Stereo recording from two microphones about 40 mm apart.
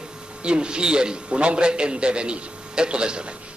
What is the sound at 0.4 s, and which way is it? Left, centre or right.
A man's voice, right.